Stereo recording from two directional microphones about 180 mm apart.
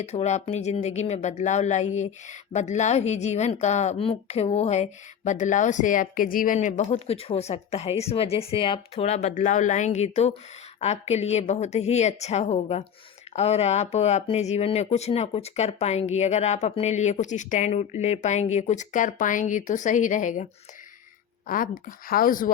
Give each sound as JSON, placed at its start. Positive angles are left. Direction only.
{"t": 0.0, "sound": "a woman's voice", "side_deg": 40}